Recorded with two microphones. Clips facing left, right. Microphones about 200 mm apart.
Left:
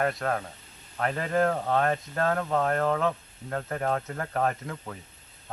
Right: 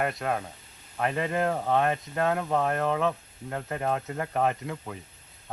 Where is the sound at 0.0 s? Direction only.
15° right (ahead or behind).